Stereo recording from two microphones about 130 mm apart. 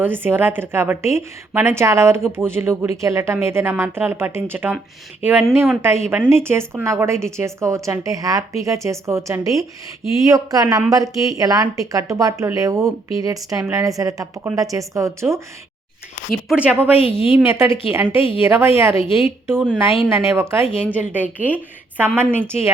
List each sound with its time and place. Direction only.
0.0 s a woman's voice: 15° right (ahead or behind)
16.5 s a woman's voice: 10° right (ahead or behind)
19.6 s a woman's voice: 5° right (ahead or behind)
20.1 s a woman's voice: 20° right (ahead or behind)